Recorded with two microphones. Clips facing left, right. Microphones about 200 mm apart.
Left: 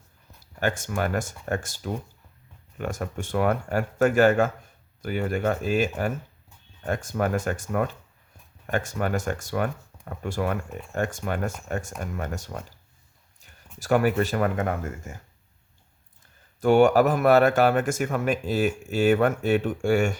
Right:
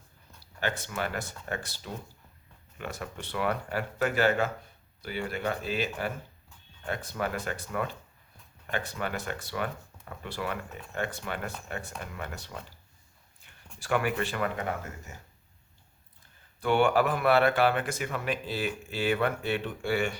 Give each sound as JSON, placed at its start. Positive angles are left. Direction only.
{"t": 0.6, "sound": "speech", "side_deg": 45}
{"t": 13.7, "sound": "speech", "side_deg": 40}
{"t": 16.6, "sound": "speech", "side_deg": 45}